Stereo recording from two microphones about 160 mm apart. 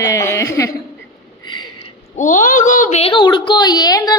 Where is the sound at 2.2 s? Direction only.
50° left (ahead or behind).